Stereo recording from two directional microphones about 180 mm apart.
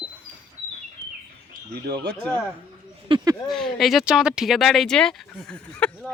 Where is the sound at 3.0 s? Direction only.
25° right (ahead or behind).